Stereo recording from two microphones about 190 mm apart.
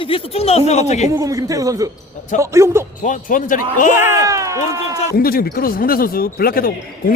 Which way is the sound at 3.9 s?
15° right (ahead or behind).